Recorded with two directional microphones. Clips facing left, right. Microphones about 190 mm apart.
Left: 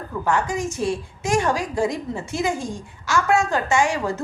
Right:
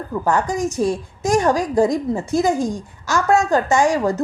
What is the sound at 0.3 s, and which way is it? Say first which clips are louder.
A woman's voice: right 3 dB; 40° right (ahead or behind).